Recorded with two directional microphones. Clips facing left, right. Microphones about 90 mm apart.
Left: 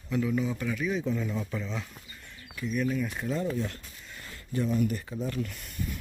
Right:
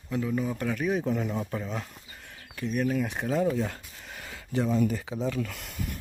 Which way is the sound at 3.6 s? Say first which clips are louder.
Right 3 dB; 90° right.